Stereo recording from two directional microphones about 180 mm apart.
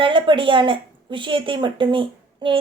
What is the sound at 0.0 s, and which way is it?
Speech, 25° right (ahead or behind).